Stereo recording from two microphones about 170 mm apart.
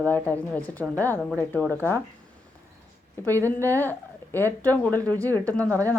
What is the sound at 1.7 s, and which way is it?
Speech, 15° left (ahead or behind).